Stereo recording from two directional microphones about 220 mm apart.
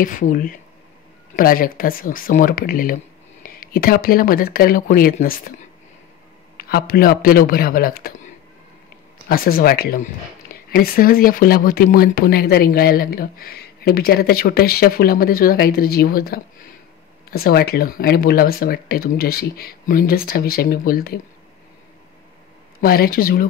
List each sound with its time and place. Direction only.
0.0 s speech: 40° left (ahead or behind)
6.5 s speech: 40° left (ahead or behind)
9.3 s speech: 45° left (ahead or behind)
22.8 s speech: 45° left (ahead or behind)